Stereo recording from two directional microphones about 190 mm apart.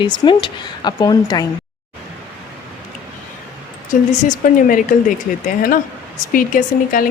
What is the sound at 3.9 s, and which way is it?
Speech, 45° left (ahead or behind).